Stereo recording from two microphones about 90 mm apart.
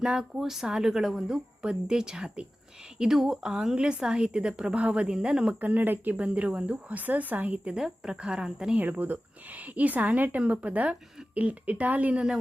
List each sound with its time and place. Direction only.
0.0 s a woman's voice: 10° right (ahead or behind)